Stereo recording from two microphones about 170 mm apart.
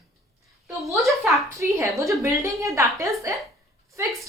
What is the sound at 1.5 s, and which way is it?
A woman's voice, 15° right (ahead or behind).